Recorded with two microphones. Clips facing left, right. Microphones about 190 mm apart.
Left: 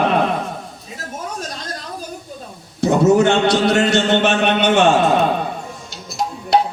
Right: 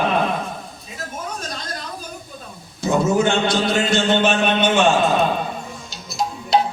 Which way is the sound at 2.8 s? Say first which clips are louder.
Left 5 dB; 70° left (ahead or behind).